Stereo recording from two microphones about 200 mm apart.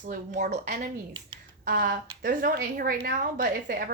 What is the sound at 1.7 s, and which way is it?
A woman's voice, 45° right (ahead or behind).